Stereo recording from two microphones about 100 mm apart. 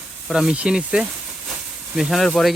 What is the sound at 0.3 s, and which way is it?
Speech, 5° right (ahead or behind).